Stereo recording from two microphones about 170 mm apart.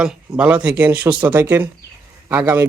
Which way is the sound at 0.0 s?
5° right (ahead or behind).